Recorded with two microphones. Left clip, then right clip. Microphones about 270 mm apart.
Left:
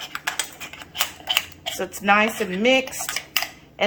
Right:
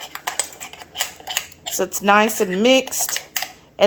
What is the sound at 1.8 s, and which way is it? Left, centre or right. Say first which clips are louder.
Speech: right 4 dB; right.